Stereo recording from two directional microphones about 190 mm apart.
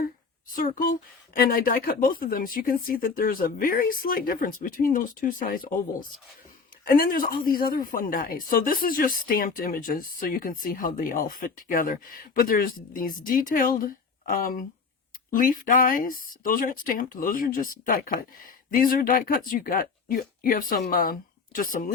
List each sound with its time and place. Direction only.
0.5 s speech: 50° left (ahead or behind)